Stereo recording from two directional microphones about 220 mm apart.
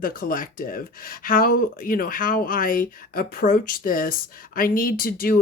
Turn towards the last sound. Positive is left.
turn(degrees=40)  # may be behind; listen again after turning